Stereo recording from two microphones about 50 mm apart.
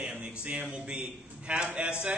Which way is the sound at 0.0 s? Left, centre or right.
Right.